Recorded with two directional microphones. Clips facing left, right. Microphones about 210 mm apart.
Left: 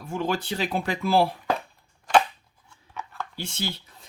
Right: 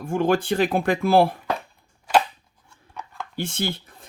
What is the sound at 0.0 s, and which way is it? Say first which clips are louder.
Speech: right 7 dB; 50° right (ahead or behind).